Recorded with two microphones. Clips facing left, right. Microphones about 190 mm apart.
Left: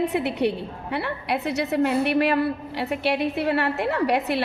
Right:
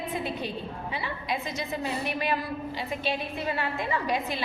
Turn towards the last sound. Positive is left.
turn(degrees=70)  # may be behind; listen again after turning